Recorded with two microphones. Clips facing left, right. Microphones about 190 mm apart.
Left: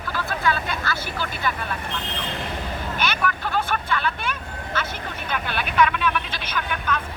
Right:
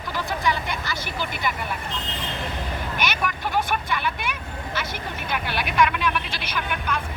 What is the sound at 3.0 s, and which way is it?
Speech, 15° right (ahead or behind).